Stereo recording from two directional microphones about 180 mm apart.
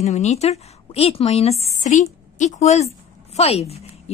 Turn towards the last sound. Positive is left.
turn(degrees=35)  # may be behind; listen again after turning